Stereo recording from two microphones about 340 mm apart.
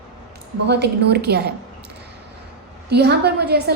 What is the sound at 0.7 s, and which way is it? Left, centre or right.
Speech, right.